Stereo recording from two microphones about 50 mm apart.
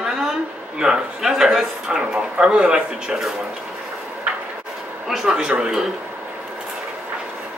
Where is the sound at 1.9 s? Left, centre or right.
Centre.